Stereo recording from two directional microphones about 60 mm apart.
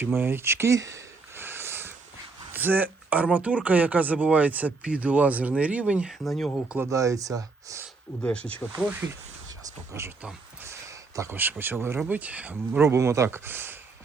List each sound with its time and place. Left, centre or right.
0.0 s speech: right
0.8 s speech: right
1.4 s a sound: right
3.3 s speech: right
6.2 s speech: centre
6.9 s speech: right
8.2 s speech: centre
8.8 s speech: right
10.8 s a sound: right
11.3 s speech: right
12.0 s speech: right
12.8 s speech: right